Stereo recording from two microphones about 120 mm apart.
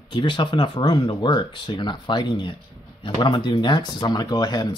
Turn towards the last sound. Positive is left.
turn(degrees=35)  # may be behind; listen again after turning